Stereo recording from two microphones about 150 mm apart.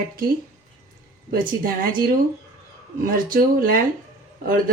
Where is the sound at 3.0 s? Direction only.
70° right (ahead or behind).